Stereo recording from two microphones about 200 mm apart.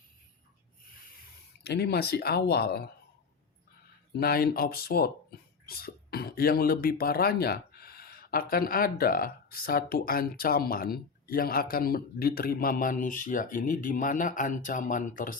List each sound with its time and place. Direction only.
1.6 s speech: 55° left (ahead or behind)
4.2 s speech: 50° left (ahead or behind)